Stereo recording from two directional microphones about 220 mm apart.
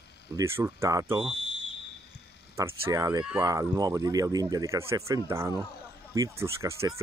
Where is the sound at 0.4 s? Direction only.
10° right (ahead or behind).